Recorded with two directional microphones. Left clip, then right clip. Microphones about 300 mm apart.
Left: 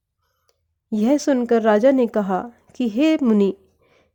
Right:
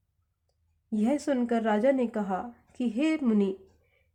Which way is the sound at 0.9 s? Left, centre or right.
Left.